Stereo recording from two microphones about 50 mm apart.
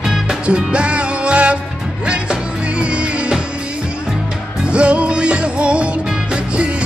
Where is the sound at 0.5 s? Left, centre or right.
Right.